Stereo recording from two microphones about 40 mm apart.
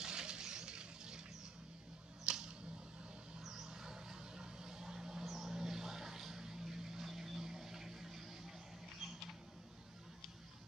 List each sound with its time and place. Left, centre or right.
0.0 s vehicle: right
2.3 s a sound: right
3.3 s vehicle: centre